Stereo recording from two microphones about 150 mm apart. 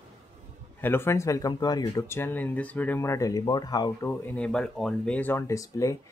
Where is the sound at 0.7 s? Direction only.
15° left (ahead or behind).